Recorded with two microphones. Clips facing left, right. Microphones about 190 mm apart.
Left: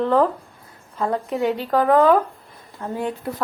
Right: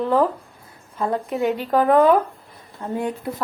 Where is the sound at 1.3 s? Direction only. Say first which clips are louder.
Right 1 dB; 15° right (ahead or behind).